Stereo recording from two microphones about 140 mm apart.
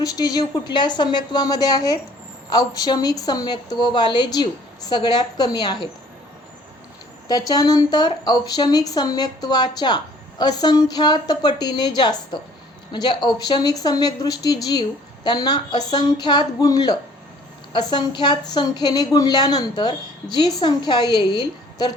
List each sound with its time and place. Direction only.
0.0 s speech: 25° left (ahead or behind)
7.3 s a woman's voice: 25° left (ahead or behind)